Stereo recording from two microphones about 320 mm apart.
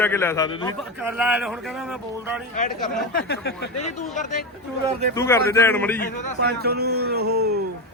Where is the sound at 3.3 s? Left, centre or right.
Left.